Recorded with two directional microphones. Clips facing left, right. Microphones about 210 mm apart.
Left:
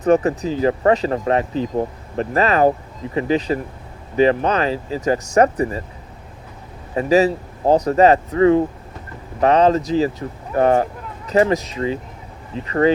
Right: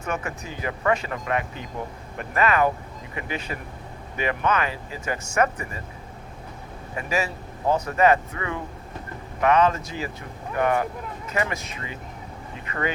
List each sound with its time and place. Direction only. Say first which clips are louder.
0.0 s speech: left 14 dB; 35° left (ahead or behind)
6.9 s speech: left 12 dB; 35° left (ahead or behind)